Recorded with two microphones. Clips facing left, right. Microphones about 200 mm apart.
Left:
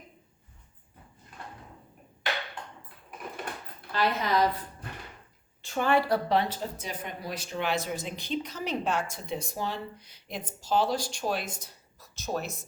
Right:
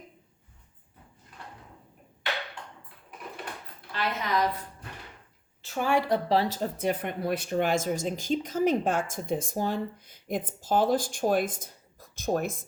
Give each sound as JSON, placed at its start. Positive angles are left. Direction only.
{"t": 3.9, "sound": "a woman's voice", "side_deg": 35}
{"t": 5.6, "sound": "speech", "side_deg": -5}
{"t": 6.5, "sound": "speech", "side_deg": -55}